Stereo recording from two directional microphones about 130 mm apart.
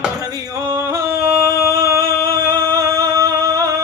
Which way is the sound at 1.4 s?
25° right (ahead or behind).